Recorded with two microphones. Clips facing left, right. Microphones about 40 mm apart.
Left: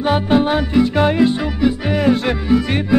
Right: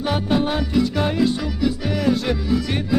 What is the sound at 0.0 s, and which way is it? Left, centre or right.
Music, left.